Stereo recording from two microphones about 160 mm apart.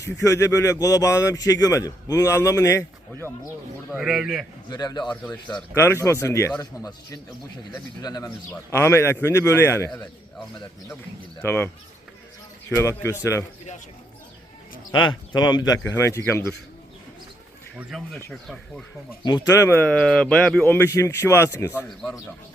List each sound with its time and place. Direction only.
0.0 s speech: 20° left (ahead or behind)
3.9 s speech: 5° right (ahead or behind)
4.7 s speech: 25° left (ahead or behind)
5.2 s speech: 10° left (ahead or behind)
11.4 s speech: 15° left (ahead or behind)
12.7 s speech: 15° left (ahead or behind)
15.3 s speech: 25° left (ahead or behind)
17.7 s speech: centre (ahead or behind)
19.2 s speech: 25° left (ahead or behind)